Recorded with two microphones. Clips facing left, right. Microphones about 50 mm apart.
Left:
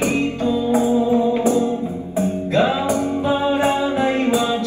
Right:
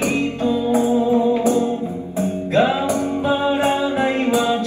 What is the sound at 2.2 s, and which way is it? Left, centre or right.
Music, right.